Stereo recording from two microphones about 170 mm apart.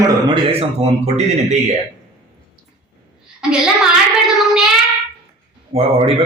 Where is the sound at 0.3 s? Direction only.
35° right (ahead or behind).